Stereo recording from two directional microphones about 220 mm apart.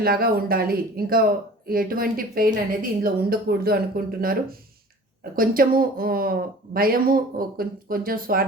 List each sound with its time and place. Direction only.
0.0 s speech: 45° right (ahead or behind)